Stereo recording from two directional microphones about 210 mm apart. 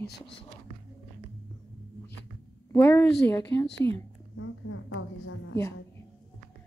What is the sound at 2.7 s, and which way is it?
Speech, 10° left (ahead or behind).